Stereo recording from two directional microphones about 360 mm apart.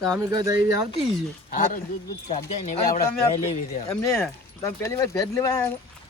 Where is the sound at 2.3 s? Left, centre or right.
Centre.